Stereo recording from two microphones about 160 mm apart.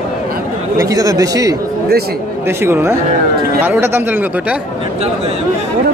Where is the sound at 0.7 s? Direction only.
20° right (ahead or behind).